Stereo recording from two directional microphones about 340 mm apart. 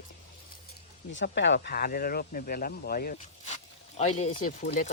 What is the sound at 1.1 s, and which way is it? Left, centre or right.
Speech, left.